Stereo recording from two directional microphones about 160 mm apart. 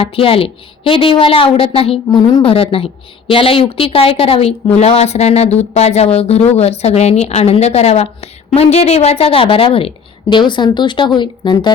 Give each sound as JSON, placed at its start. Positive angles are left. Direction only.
{"t": 0.0, "sound": "a woman's voice", "side_deg": 35}